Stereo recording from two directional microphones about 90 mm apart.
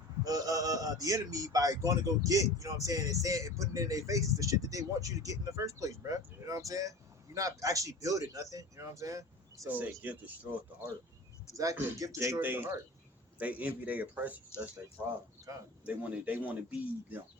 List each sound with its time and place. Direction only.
0.3 s speech: 45° right (ahead or behind)
9.6 s speech: 20° right (ahead or behind)
11.5 s speech: 40° right (ahead or behind); by 14.7 s 20° right (ahead or behind)
15.5 s speech: 40° right (ahead or behind)
15.9 s speech: 15° right (ahead or behind)